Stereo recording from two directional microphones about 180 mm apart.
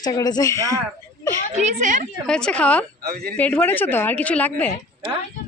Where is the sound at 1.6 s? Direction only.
45° right (ahead or behind).